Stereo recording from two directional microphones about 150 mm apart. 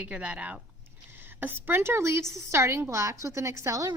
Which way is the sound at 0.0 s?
10° right (ahead or behind).